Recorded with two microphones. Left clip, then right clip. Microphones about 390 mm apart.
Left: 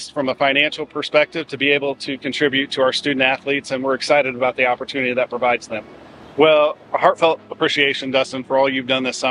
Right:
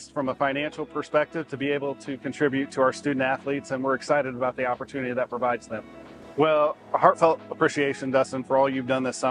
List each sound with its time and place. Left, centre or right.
0.2 s speech: right